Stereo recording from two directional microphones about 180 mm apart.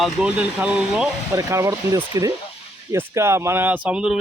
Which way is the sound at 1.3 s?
15° right (ahead or behind).